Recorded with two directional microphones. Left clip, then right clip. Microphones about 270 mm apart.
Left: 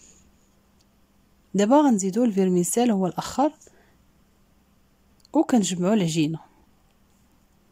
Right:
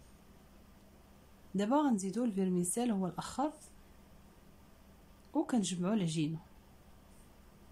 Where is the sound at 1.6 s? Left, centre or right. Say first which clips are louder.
Left 13 dB; left.